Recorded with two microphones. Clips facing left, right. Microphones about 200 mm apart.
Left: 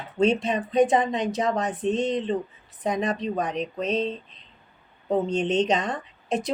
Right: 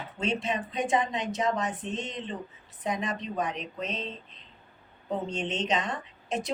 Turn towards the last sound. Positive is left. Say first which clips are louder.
# left 5 dB
turn(degrees=35)  # may be behind; listen again after turning